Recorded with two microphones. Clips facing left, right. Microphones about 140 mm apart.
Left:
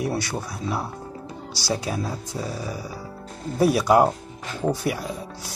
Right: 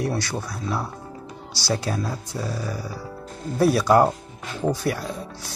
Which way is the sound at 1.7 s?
10° left (ahead or behind).